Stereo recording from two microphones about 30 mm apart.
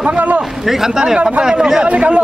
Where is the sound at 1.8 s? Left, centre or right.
Right.